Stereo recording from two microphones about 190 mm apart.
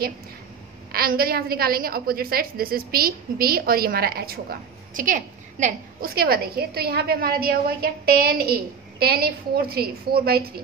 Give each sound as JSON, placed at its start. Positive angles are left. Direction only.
{"t": 0.9, "sound": "a woman's voice", "side_deg": -50}